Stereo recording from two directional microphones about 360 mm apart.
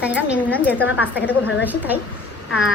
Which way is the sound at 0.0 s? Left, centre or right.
Centre.